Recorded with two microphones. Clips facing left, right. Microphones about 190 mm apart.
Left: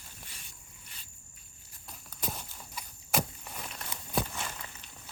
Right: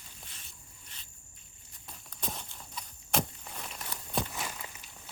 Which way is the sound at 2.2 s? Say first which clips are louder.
Left 1 dB; 5° left (ahead or behind).